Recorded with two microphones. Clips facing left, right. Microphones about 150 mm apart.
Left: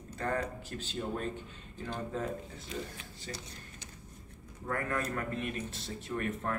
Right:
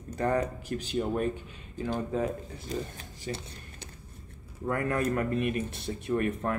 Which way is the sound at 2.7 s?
40° right (ahead or behind).